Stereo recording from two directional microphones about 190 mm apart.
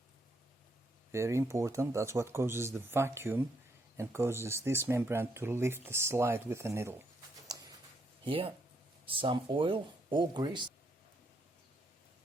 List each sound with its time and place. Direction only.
1.1 s speech: 15° right (ahead or behind)
8.2 s speech: 30° right (ahead or behind)